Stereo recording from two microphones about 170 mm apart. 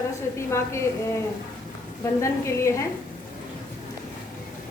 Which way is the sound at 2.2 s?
15° left (ahead or behind).